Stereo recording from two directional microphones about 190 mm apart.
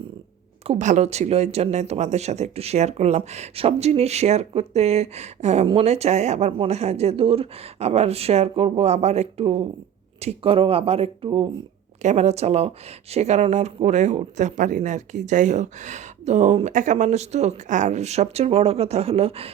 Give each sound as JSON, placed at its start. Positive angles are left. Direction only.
{"t": 0.6, "sound": "speech", "side_deg": -35}